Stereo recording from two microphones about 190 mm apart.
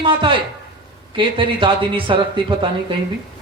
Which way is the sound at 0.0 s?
25° right (ahead or behind).